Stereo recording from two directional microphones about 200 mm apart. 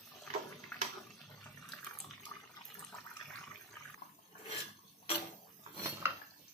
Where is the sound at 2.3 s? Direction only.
5° left (ahead or behind).